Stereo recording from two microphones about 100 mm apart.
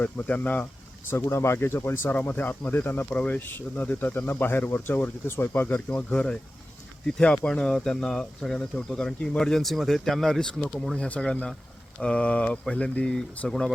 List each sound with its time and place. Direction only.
0.0 s speech: 15° left (ahead or behind)
1.1 s speech: 25° left (ahead or behind); by 13.7 s 5° left (ahead or behind)